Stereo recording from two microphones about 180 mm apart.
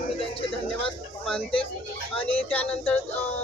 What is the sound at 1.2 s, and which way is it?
Speech, 5° left (ahead or behind).